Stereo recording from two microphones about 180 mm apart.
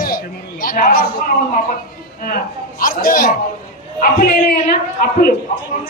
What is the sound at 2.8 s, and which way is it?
A man's voice, 50° left (ahead or behind).